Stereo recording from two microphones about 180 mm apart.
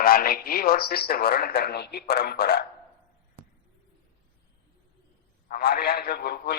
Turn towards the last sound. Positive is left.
turn(degrees=60)  # may be behind; listen again after turning